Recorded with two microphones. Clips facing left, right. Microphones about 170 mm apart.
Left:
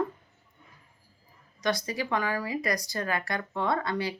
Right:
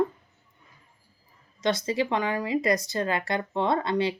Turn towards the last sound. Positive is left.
turn(degrees=-25)  # may be behind; listen again after turning